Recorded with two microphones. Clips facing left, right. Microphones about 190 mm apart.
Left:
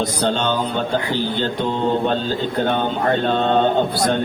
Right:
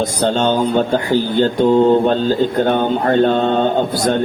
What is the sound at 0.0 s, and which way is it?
Speech, 45° right (ahead or behind).